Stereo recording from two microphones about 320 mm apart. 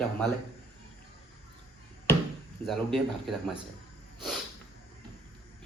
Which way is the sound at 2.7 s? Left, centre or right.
Centre.